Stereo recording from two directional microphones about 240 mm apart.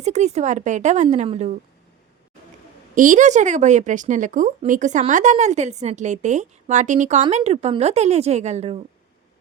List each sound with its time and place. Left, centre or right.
0.0 s speech: right
2.9 s speech: right